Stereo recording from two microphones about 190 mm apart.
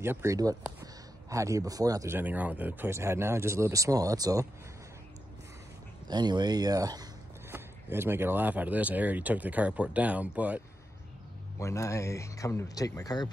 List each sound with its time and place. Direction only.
0.0 s speech: 15° right (ahead or behind)
6.0 s speech: 20° right (ahead or behind)
11.5 s speech: 15° left (ahead or behind)